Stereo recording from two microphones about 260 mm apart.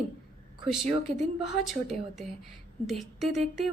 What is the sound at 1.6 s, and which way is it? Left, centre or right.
A woman's voice, centre.